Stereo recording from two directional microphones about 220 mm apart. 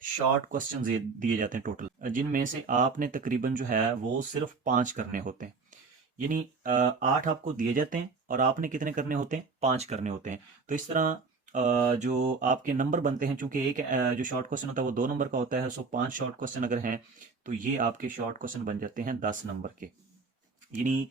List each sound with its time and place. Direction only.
0.4 s speech: 35° right (ahead or behind)